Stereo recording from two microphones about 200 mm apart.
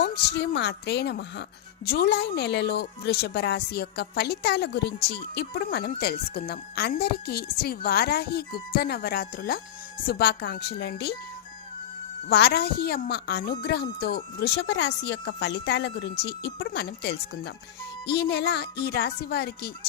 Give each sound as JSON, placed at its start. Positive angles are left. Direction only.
{"t": 0.0, "sound": "a woman's voice", "side_deg": 55}
{"t": 12.3, "sound": "a woman's voice", "side_deg": 55}